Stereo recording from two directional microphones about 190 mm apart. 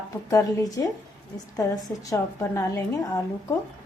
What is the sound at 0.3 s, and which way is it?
A woman's voice, 15° left (ahead or behind).